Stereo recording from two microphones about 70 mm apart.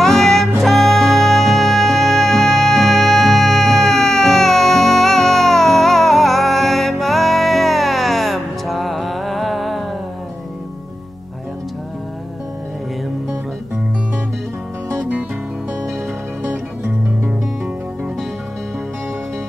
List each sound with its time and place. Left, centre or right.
0.0 s music: centre
15.0 s music: right